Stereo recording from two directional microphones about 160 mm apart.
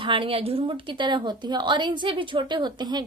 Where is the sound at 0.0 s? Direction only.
35° right (ahead or behind).